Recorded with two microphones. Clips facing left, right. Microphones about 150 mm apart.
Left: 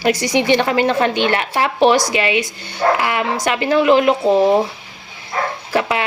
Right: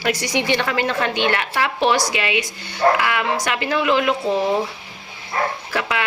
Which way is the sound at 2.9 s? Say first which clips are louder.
Left 2 dB; 35° left (ahead or behind).